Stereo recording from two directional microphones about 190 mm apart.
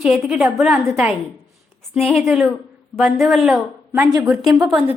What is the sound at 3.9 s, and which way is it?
Speech, 15° right (ahead or behind).